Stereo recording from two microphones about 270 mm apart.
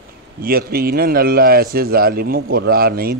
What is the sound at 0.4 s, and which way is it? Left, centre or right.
A man's voice, right.